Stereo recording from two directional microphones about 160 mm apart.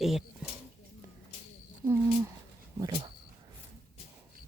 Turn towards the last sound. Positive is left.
turn(degrees=-30)  # may be behind; listen again after turning